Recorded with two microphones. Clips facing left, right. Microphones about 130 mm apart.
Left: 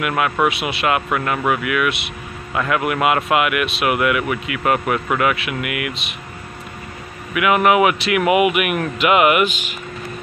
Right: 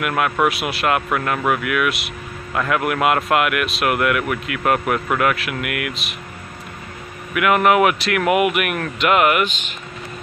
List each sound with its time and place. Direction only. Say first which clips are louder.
0.0 s a man's voice: even; centre (ahead or behind)
7.3 s a man's voice: even; centre (ahead or behind)